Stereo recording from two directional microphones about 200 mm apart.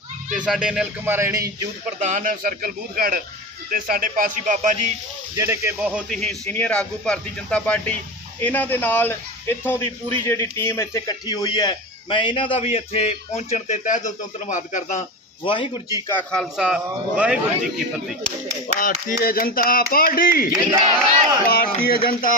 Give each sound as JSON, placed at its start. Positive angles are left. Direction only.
{"t": 0.3, "sound": "a man's voice", "side_deg": -5}
{"t": 2.0, "sound": "a man's voice", "side_deg": -40}
{"t": 5.4, "sound": "a man's voice", "side_deg": -15}
{"t": 15.4, "sound": "speech", "side_deg": 25}
{"t": 16.0, "sound": "a man's voice", "side_deg": 5}
{"t": 18.8, "sound": "speech", "side_deg": 45}
{"t": 20.5, "sound": "speech", "side_deg": -25}
{"t": 21.4, "sound": "speech", "side_deg": 45}